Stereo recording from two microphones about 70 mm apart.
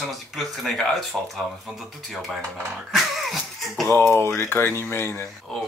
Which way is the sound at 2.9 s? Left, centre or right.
Centre.